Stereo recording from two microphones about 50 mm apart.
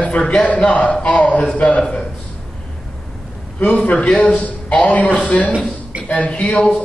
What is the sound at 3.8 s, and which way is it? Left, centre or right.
A man's voice, left.